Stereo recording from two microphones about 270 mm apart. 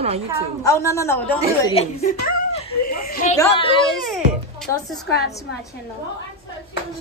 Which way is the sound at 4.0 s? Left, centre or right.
Centre.